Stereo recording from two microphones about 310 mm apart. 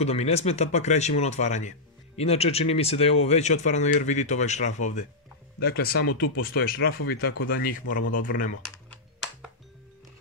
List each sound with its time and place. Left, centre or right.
0.0 s speech: centre